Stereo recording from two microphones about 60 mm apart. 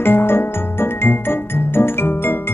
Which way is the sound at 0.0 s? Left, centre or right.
Left.